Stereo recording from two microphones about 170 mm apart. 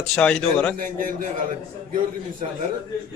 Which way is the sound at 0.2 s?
5° left (ahead or behind).